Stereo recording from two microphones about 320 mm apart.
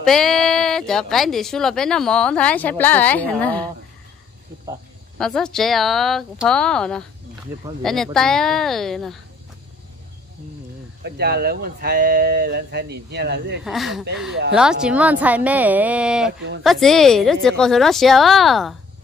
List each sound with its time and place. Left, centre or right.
0.0 s speech: centre
5.2 s speech: centre
11.1 s speech: right
13.7 s speech: centre